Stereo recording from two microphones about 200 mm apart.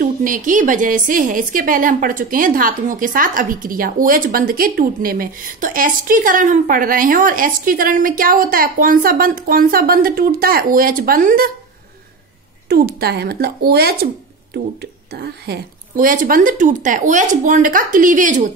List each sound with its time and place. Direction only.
0.0 s a woman's voice: 40° right (ahead or behind)
12.6 s speech: 50° right (ahead or behind)